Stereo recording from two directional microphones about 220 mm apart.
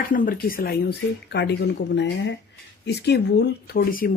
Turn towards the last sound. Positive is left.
turn(degrees=40)  # may be behind; listen again after turning